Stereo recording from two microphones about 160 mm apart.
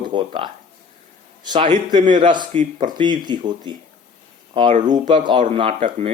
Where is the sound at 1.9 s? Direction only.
50° right (ahead or behind).